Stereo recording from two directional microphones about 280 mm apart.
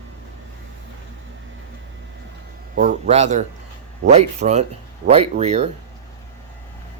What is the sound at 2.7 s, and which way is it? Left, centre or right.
A man's voice, right.